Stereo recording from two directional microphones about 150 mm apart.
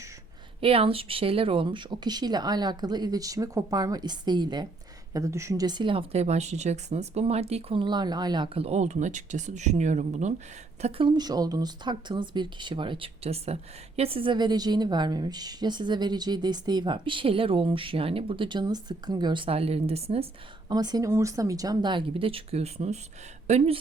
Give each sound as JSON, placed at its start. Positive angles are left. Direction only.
{"t": 0.6, "sound": "speech", "side_deg": -40}
{"t": 10.8, "sound": "speech", "side_deg": -40}
{"t": 20.7, "sound": "speech", "side_deg": -25}